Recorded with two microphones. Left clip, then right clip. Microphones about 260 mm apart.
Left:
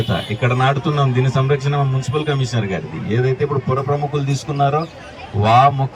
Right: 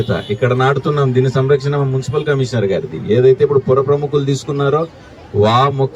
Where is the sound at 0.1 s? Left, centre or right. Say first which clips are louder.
Right 5 dB; centre.